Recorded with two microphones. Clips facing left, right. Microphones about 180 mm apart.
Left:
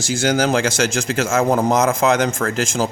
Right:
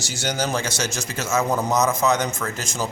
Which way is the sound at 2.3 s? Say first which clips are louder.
Left 7 dB; 50° left (ahead or behind).